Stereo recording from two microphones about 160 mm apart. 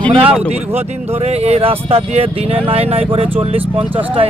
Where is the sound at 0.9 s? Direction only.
40° right (ahead or behind).